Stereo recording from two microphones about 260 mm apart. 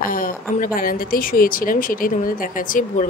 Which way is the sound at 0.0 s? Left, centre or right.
Left.